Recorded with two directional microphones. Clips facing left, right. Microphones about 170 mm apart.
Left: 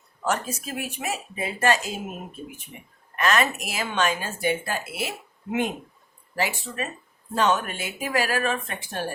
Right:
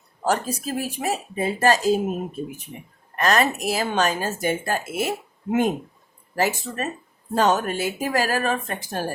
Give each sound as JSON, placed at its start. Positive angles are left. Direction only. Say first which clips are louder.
{"t": 0.3, "sound": "speech", "louder": "right 4 dB", "side_deg": -35}